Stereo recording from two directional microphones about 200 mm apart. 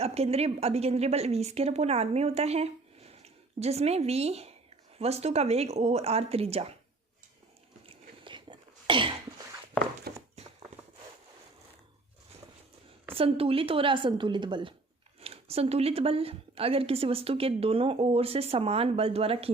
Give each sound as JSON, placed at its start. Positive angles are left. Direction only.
{"t": 0.0, "sound": "a woman's voice", "side_deg": -30}
{"t": 8.2, "sound": "whispering", "side_deg": -25}
{"t": 10.1, "sound": "horse", "side_deg": -50}
{"t": 13.1, "sound": "speech", "side_deg": -30}